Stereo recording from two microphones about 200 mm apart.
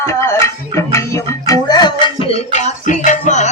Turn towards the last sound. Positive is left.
turn(degrees=35)  # may be behind; listen again after turning